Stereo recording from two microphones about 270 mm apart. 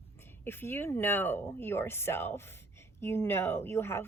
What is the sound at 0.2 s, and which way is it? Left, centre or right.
Speech, centre.